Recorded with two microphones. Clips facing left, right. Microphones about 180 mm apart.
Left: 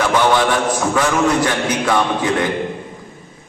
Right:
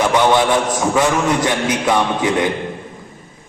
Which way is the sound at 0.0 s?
20° right (ahead or behind).